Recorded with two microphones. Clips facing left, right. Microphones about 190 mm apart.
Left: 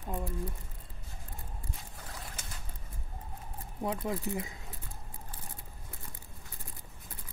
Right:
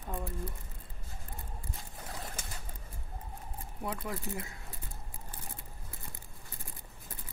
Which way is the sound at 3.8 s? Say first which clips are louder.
Left 4 dB; 20° left (ahead or behind).